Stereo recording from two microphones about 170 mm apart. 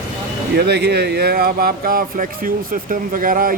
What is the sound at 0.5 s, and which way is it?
Speech, 75° right (ahead or behind).